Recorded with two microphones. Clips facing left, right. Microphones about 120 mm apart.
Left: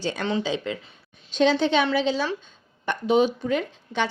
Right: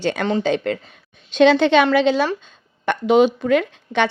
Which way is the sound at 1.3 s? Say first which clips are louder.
Right 7 dB; 70° right (ahead or behind).